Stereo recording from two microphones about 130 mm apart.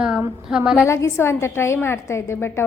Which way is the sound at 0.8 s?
20° left (ahead or behind).